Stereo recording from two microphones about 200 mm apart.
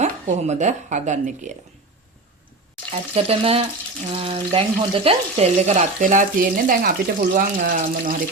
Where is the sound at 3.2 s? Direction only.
30° right (ahead or behind).